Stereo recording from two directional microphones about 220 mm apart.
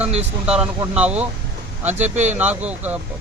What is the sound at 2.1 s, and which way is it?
Speech, 30° right (ahead or behind).